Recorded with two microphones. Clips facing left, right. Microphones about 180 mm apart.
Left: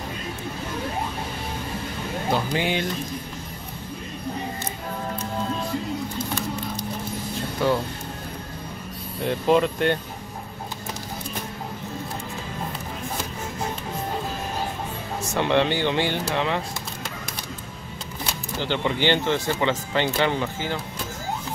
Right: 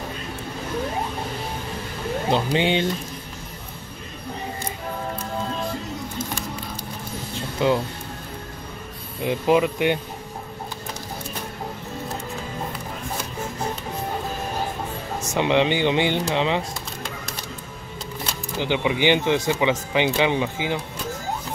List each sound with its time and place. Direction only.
2.3 s speech: 25° right (ahead or behind)
7.6 s speech: 20° right (ahead or behind)
9.2 s speech: 10° right (ahead or behind)
15.3 s speech: 15° right (ahead or behind)
18.6 s speech: 15° right (ahead or behind)